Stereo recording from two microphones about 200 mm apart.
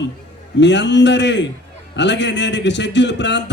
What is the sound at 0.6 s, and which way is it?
A man's voice, 60° left (ahead or behind).